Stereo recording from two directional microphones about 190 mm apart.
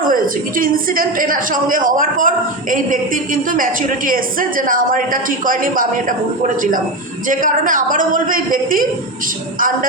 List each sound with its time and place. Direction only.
0.0 s a woman's voice: 45° right (ahead or behind)